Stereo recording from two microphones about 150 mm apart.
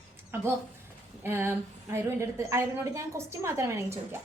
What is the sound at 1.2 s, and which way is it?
A woman's voice, 15° right (ahead or behind).